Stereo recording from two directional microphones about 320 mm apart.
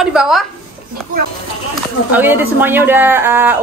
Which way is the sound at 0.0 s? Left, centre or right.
Centre.